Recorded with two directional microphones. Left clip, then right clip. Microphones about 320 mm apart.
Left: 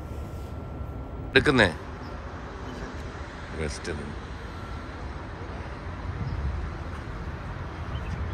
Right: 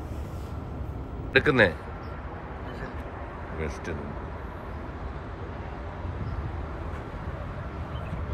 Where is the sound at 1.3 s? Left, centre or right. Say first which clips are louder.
Even; centre.